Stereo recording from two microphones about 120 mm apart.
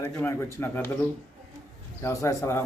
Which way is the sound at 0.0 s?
20° left (ahead or behind).